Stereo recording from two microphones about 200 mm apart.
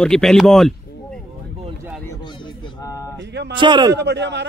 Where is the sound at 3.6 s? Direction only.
25° right (ahead or behind).